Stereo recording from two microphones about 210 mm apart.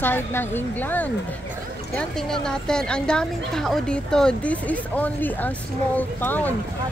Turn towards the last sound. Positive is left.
turn(degrees=10)  # may be behind; listen again after turning